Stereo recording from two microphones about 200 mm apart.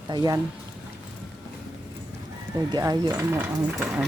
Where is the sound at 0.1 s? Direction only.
20° right (ahead or behind).